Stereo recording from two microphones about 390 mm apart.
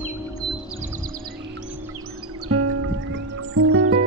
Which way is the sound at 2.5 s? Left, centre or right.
Right.